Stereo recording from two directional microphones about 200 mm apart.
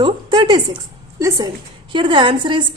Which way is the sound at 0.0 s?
20° right (ahead or behind).